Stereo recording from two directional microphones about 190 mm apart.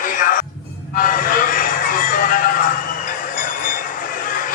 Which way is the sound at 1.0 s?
45° left (ahead or behind).